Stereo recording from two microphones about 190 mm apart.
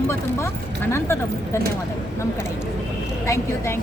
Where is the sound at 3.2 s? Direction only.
15° left (ahead or behind).